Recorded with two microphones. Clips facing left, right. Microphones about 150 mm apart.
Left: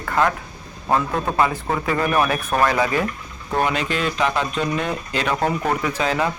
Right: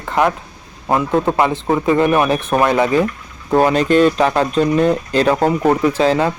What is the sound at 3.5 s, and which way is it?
Speech, 40° right (ahead or behind).